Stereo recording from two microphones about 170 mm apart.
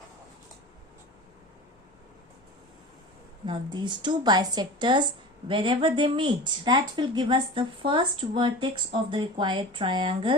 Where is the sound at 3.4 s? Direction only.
25° right (ahead or behind).